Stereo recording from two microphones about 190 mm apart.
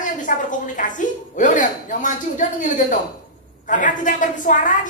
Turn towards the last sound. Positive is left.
turn(degrees=45)  # may be behind; listen again after turning